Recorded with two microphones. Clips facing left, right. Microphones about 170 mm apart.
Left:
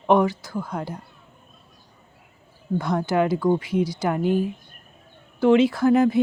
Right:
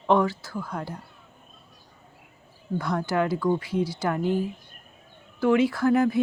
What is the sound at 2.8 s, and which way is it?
Speech, 20° left (ahead or behind).